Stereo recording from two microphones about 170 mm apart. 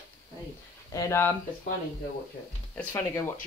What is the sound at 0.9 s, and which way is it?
Speech, 15° left (ahead or behind).